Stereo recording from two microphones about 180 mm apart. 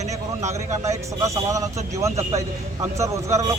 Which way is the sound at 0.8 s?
15° right (ahead or behind).